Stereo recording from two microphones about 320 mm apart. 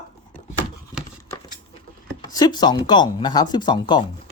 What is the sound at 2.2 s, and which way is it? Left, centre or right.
Speech, centre.